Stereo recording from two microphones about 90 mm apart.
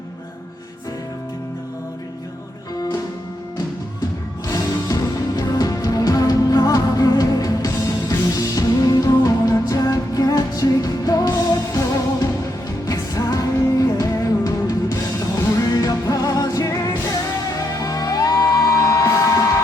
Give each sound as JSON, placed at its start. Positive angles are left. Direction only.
{"t": 4.4, "sound": "music", "side_deg": 45}
{"t": 12.9, "sound": "music", "side_deg": 40}